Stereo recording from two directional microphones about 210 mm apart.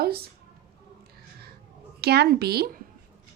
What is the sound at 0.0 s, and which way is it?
Speech, 50° right (ahead or behind).